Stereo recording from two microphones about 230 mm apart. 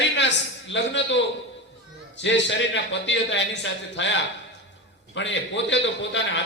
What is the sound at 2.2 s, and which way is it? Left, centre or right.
A man's voice, left.